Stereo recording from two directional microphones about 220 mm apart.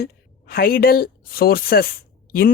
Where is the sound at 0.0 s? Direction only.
45° left (ahead or behind).